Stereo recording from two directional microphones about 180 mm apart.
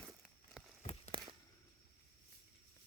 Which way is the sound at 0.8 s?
35° left (ahead or behind).